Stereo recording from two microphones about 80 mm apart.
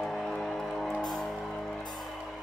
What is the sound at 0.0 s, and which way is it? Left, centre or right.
Music, centre.